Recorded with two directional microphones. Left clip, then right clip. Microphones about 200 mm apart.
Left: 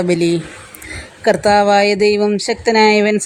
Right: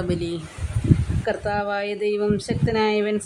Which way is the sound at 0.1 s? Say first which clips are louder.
Left 12 dB; 35° left (ahead or behind).